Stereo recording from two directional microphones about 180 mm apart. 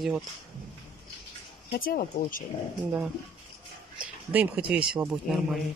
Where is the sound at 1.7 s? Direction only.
55° left (ahead or behind).